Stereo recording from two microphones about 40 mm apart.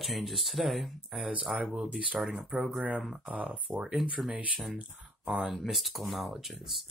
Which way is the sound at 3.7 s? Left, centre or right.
Centre.